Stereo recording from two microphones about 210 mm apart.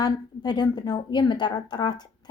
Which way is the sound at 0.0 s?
20° left (ahead or behind).